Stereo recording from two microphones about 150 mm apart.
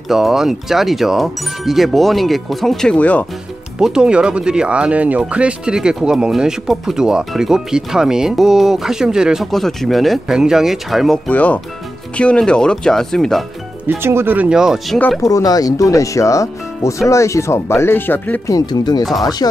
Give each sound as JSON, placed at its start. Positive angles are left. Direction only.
{"t": 0.1, "sound": "speech", "side_deg": 0}
{"t": 3.8, "sound": "speech", "side_deg": -5}
{"t": 13.8, "sound": "speech", "side_deg": -15}
{"t": 15.2, "sound": "speech", "side_deg": 25}
{"t": 18.5, "sound": "speech", "side_deg": 25}